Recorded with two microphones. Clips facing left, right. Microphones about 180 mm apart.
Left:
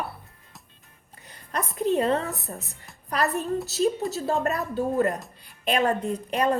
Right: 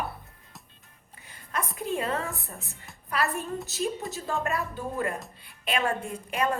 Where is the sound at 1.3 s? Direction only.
35° left (ahead or behind).